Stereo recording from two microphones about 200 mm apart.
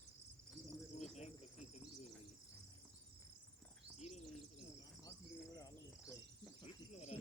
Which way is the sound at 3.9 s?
35° left (ahead or behind).